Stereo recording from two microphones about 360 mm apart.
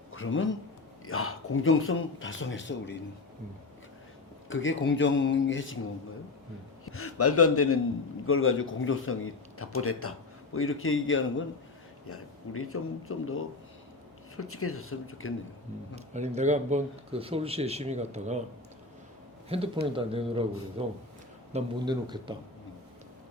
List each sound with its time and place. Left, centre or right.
0.1 s a man's voice: left
4.4 s a man's voice: left
6.8 s a man's voice: left
16.0 s speech: centre
19.5 s speech: centre